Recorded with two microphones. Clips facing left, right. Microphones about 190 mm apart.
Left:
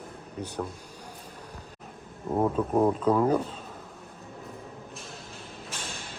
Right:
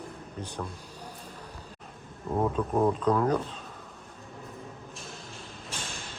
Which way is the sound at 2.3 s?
15° left (ahead or behind).